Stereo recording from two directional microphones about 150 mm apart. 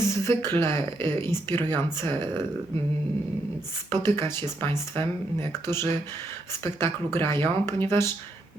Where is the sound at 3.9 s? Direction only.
15° left (ahead or behind).